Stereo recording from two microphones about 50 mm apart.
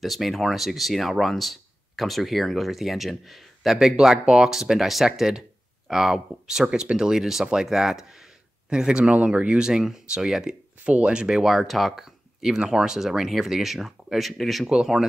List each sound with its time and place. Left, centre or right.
0.0 s speech: centre
10.8 s speech: right; by 14.7 s centre
14.7 s speech: centre